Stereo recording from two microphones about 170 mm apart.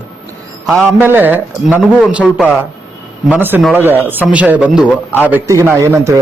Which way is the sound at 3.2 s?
10° right (ahead or behind).